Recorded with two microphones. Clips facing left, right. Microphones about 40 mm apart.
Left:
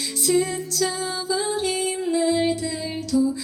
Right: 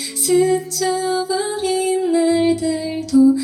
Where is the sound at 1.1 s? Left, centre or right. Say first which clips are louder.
Right 5 dB; right.